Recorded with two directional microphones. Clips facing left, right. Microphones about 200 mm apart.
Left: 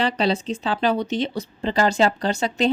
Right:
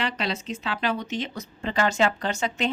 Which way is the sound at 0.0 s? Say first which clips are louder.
Left 7 dB; 30° left (ahead or behind).